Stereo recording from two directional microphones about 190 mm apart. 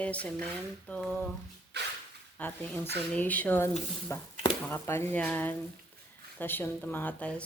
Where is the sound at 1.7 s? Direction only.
60° right (ahead or behind).